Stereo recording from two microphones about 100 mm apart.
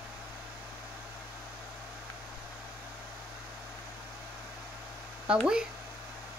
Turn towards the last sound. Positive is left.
turn(degrees=-10)  # may be behind; listen again after turning